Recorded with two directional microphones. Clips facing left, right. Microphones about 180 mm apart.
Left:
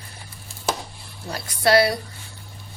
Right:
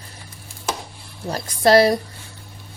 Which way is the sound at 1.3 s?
40° right (ahead or behind).